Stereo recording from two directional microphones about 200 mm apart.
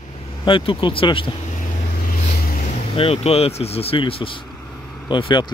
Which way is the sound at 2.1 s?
45° left (ahead or behind).